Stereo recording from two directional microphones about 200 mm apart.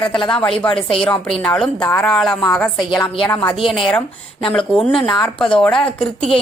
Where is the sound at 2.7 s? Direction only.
20° left (ahead or behind).